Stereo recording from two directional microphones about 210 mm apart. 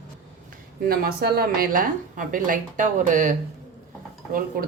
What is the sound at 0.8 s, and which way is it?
A woman's voice, 45° right (ahead or behind).